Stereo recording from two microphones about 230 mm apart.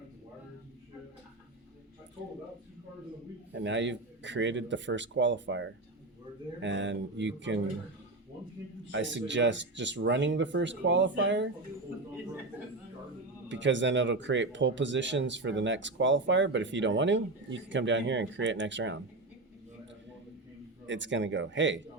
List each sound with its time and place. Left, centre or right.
3.5 s speech: right
8.9 s speech: right
13.5 s speech: right
20.8 s speech: right